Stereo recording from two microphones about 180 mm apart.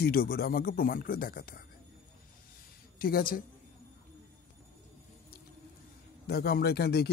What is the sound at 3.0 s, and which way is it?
Speech, 55° left (ahead or behind).